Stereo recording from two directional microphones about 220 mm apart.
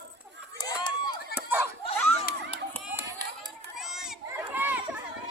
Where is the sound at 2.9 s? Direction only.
15° right (ahead or behind).